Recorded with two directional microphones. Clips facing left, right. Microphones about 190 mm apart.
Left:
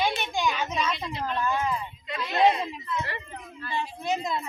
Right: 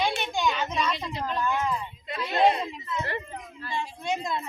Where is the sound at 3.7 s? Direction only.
5° left (ahead or behind).